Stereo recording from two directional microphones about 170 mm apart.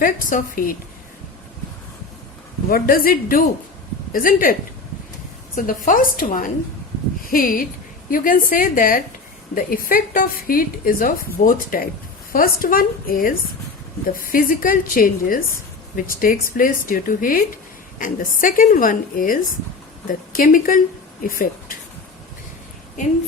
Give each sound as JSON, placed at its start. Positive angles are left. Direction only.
{"t": 0.0, "sound": "a woman's voice", "side_deg": 55}
{"t": 2.6, "sound": "a woman's voice", "side_deg": 60}
{"t": 5.5, "sound": "a woman's voice", "side_deg": 55}